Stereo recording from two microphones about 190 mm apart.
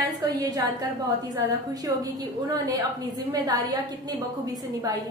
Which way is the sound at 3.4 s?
20° right (ahead or behind).